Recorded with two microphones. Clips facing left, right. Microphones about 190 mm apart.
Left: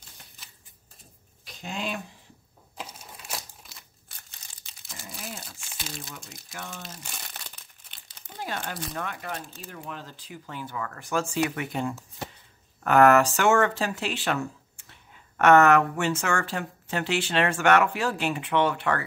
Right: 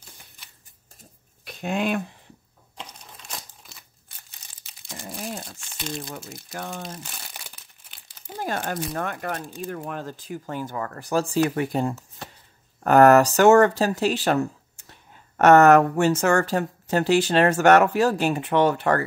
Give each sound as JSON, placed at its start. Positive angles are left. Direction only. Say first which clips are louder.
{"t": 1.4, "sound": "speech", "louder": "right 8 dB", "side_deg": -60}
{"t": 2.8, "sound": "crumpling", "louder": "left 1 dB", "side_deg": 5}
{"t": 5.6, "sound": "crumpling", "louder": "right 7 dB", "side_deg": 5}
{"t": 6.5, "sound": "speech", "louder": "right 6 dB", "side_deg": -50}
{"t": 8.4, "sound": "speech", "louder": "right 6 dB", "side_deg": -45}